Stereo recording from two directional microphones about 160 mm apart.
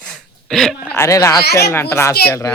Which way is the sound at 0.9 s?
20° left (ahead or behind).